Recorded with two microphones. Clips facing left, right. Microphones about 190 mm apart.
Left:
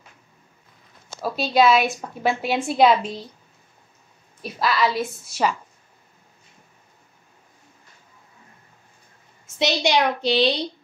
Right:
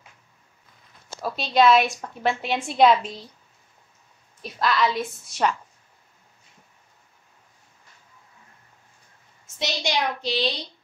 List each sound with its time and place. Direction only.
1.2 s a woman's voice: 5° left (ahead or behind)
4.4 s a woman's voice: 5° left (ahead or behind)
9.6 s a woman's voice: 70° left (ahead or behind)